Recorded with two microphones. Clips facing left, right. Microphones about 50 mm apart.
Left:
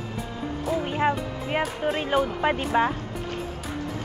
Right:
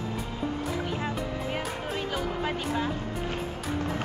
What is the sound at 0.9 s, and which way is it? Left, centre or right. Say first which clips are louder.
Music: left 6 dB; left.